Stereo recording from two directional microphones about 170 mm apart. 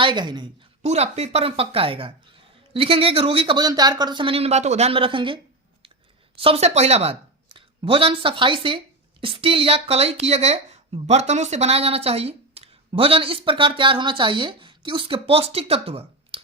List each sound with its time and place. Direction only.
0.0 s a woman's voice: 25° right (ahead or behind)
0.8 s a woman's voice: 40° right (ahead or behind)